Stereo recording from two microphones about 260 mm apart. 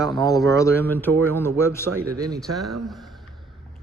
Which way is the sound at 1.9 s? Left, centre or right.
Right.